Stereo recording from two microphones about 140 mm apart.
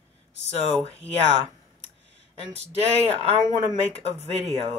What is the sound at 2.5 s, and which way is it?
Speech, 50° right (ahead or behind).